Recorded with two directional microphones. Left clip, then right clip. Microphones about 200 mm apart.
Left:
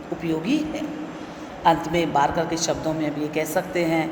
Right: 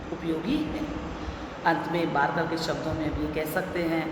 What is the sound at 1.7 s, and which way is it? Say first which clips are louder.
A woman's voice: left 6 dB; 40° left (ahead or behind).